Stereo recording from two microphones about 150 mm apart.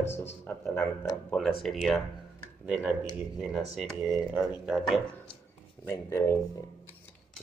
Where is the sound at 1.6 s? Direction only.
Centre (ahead or behind).